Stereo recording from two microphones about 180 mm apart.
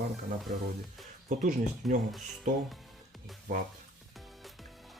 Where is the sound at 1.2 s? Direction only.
45° right (ahead or behind).